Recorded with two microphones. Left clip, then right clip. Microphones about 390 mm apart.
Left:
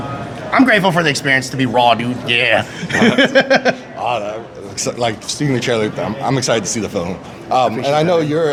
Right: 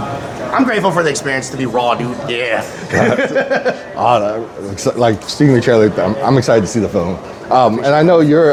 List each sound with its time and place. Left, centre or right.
0.5 s speech: left
4.0 s a man's voice: right
4.8 s speech: right